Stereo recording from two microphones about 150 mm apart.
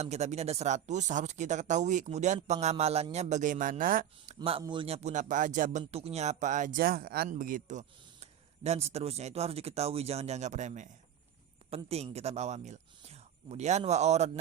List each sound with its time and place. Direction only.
0.0 s speech: 50° right (ahead or behind); by 4.0 s 65° right (ahead or behind)
4.3 s a sound: 50° right (ahead or behind)
4.6 s a man's voice: 35° right (ahead or behind)
4.9 s speech: 50° right (ahead or behind)
5.8 s speech: 40° right (ahead or behind); by 7.3 s 85° right
7.3 s speech: 65° right (ahead or behind); by 14.3 s 50° right (ahead or behind)